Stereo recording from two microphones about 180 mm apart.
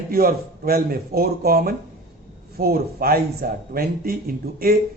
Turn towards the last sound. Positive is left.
turn(degrees=-55)  # may be behind; listen again after turning